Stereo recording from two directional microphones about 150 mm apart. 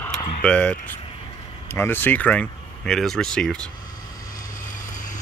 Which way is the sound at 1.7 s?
15° left (ahead or behind).